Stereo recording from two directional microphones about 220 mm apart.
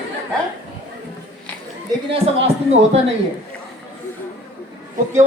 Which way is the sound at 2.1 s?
25° right (ahead or behind).